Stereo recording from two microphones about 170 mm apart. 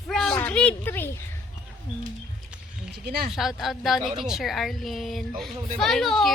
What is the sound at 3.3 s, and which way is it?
A woman's voice, centre (ahead or behind).